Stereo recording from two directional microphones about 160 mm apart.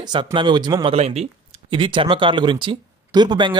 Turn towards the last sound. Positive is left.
turn(degrees=-30)  # may be behind; listen again after turning